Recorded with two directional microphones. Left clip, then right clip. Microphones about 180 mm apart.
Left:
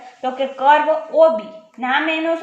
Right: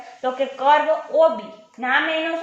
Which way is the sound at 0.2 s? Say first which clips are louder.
Left 2 dB; 25° left (ahead or behind).